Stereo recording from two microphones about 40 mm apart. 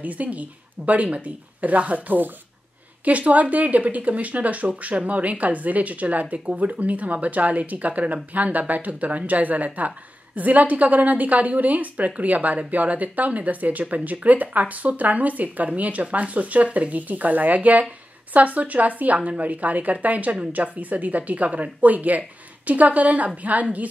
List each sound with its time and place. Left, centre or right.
0.0 s a woman's voice: right
3.1 s a woman's voice: right